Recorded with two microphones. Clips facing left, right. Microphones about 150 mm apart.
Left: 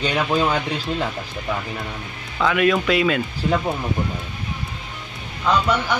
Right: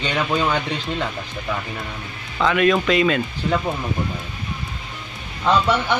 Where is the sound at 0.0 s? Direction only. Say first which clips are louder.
Left 1 dB; 10° left (ahead or behind).